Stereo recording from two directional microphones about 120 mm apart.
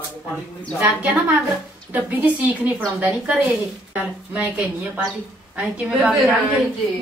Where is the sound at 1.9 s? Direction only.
15° right (ahead or behind).